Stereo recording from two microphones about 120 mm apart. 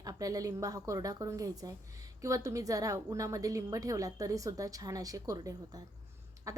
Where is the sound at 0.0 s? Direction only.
30° right (ahead or behind).